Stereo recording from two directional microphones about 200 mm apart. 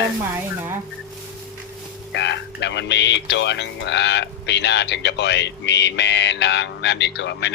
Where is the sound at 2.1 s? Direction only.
60° left (ahead or behind).